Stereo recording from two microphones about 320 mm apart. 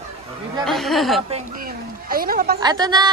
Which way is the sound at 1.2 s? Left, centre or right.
Right.